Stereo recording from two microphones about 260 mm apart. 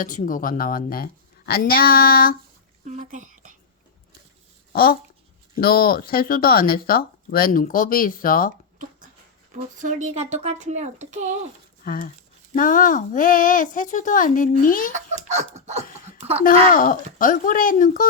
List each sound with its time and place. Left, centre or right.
0.0 s speech: left
2.8 s speech: right
4.7 s speech: left
9.6 s speech: right
11.8 s speech: left
14.9 s speech: right
16.1 s a sound: right
16.7 s speech: left